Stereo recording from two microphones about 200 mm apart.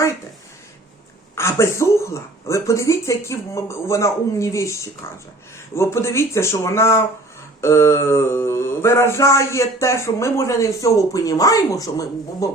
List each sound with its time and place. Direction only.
1.4 s mantra: 15° left (ahead or behind)